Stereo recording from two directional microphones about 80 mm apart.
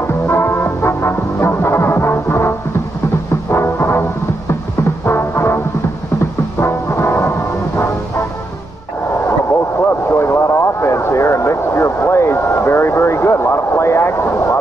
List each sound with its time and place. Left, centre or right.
0.3 s music: left
3.5 s music: left
5.0 s music: left
6.6 s music: left
10.0 s vehicle: left